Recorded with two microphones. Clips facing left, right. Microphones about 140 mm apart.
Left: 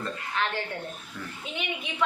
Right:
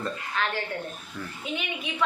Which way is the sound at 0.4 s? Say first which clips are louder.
Even; 20° left (ahead or behind).